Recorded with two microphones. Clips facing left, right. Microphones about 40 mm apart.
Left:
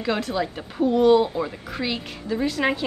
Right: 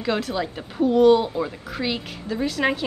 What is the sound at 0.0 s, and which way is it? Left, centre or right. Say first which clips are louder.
Speech: even; centre.